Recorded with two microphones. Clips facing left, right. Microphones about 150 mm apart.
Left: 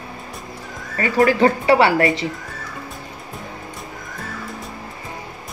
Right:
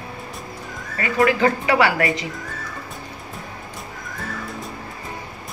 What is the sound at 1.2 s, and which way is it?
Speech, 35° left (ahead or behind).